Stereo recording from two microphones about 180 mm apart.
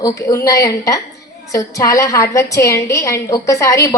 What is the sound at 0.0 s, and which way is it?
A woman's voice, 20° left (ahead or behind).